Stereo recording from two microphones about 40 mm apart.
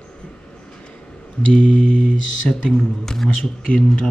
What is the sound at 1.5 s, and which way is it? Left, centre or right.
Speech, left.